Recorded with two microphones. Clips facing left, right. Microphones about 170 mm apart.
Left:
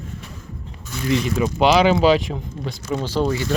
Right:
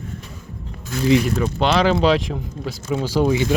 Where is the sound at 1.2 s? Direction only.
5° left (ahead or behind).